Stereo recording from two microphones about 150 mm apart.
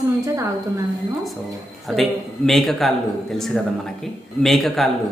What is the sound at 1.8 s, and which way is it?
A man's voice, centre (ahead or behind).